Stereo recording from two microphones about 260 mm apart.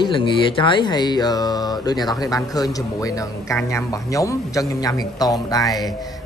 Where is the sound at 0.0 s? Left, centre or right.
Centre.